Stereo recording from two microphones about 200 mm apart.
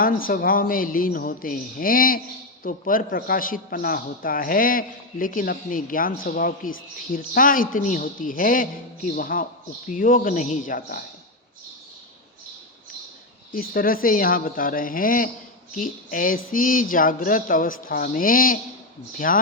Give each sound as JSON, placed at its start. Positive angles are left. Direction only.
{"t": 0.0, "sound": "a man's voice", "side_deg": 45}
{"t": 13.5, "sound": "a man's voice", "side_deg": 45}